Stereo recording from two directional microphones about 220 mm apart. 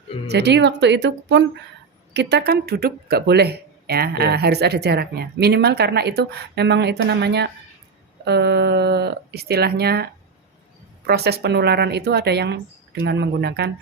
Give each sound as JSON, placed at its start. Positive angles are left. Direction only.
{"t": 0.3, "sound": "speech", "side_deg": -50}